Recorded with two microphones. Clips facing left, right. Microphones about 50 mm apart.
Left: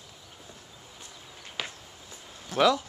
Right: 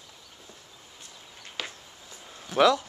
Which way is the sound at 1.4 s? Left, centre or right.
Centre.